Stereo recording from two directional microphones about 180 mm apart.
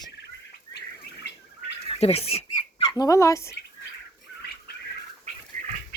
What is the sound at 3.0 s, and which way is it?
Speech, 20° left (ahead or behind).